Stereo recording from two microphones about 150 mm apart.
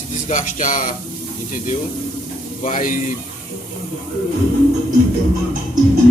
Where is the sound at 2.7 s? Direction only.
60° left (ahead or behind).